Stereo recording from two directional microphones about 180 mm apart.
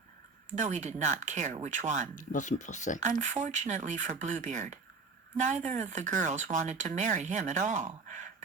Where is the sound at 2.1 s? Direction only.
45° left (ahead or behind).